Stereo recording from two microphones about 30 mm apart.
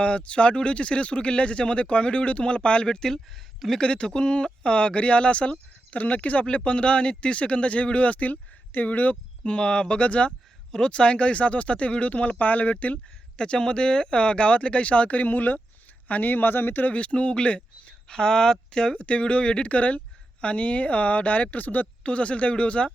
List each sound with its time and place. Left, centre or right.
0.0 s speech: left
6.7 s speech: left
9.4 s speech: left
10.7 s speech: left
12.4 s speech: left
13.3 s speech: left
15.2 s speech: left
16.9 s speech: left
18.1 s speech: left
18.9 s speech: left
19.7 s speech: left
22.0 s speech: left